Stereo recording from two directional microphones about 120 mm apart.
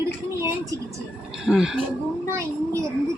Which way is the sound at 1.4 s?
5° right (ahead or behind).